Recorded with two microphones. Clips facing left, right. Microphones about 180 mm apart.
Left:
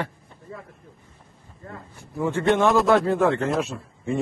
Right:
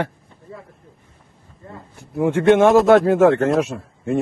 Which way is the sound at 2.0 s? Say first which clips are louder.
Right 6 dB; 65° right (ahead or behind).